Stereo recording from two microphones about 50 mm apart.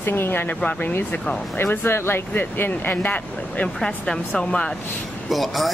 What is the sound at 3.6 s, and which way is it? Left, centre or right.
Speech, centre.